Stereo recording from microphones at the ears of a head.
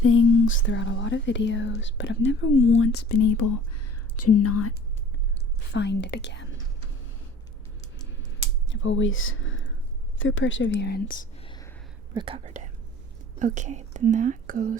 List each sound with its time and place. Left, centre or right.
0.0 s speech: left
8.7 s speech: left
10.3 s speech: left
12.1 s speech: right